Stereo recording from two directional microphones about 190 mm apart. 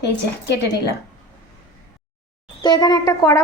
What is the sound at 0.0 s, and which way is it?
Speech, 65° left (ahead or behind).